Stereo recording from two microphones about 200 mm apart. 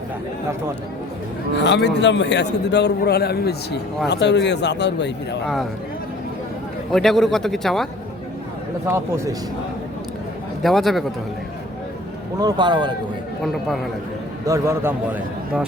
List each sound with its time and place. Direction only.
1.5 s a man's voice: 60° left (ahead or behind)
6.9 s speech: centre (ahead or behind)
8.9 s a man's voice: 15° right (ahead or behind)
10.6 s speech: centre (ahead or behind)
12.4 s a man's voice: 20° right (ahead or behind)
13.4 s speech: centre (ahead or behind)
14.4 s a man's voice: 15° right (ahead or behind)